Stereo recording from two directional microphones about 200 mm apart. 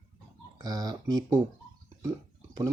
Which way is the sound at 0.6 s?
20° right (ahead or behind).